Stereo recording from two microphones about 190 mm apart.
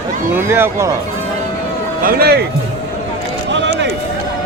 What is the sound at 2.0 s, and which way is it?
Speech, 50° right (ahead or behind).